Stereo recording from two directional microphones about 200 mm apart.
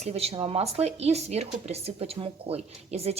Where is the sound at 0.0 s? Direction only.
30° right (ahead or behind).